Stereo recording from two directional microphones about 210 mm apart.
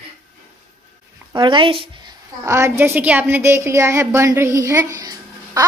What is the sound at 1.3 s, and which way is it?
Speech, 20° right (ahead or behind).